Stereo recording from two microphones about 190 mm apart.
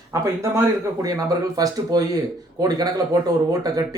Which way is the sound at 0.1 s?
15° right (ahead or behind).